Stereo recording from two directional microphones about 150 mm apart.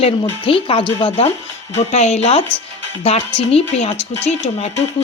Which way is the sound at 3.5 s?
40° left (ahead or behind).